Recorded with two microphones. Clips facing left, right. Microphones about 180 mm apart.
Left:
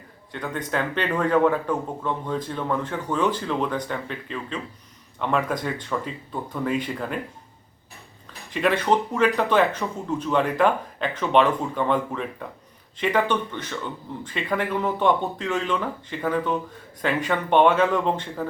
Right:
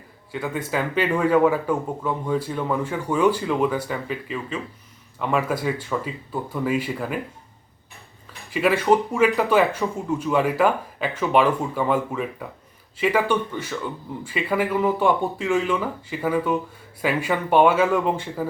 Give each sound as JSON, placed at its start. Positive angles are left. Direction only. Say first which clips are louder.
{"t": 0.3, "sound": "a man's voice", "louder": "right 2 dB", "side_deg": -5}
{"t": 8.4, "sound": "a man's voice", "louder": "right 3 dB", "side_deg": -5}